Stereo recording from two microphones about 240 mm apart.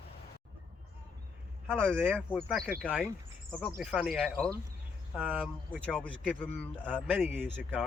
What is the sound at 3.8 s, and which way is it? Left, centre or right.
Speech, centre.